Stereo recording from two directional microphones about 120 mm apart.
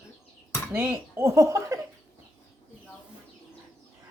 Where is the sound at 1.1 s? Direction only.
25° right (ahead or behind).